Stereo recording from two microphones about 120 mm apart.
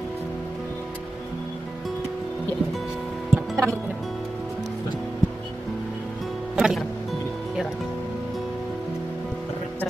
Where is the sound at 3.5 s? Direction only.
25° right (ahead or behind).